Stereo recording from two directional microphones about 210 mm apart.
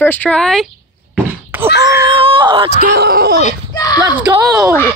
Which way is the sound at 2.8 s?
50° right (ahead or behind).